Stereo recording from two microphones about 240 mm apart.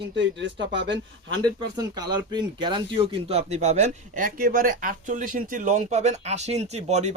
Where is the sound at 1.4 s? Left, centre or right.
Centre.